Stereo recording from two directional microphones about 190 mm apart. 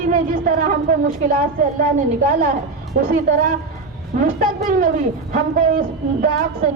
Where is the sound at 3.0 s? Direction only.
45° right (ahead or behind).